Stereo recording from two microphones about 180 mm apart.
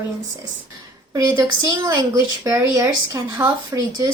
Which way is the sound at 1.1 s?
20° right (ahead or behind).